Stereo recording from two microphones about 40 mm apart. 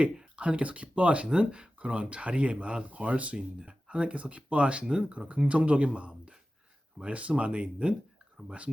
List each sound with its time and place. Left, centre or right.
0.3 s speech: right
3.3 s speech: right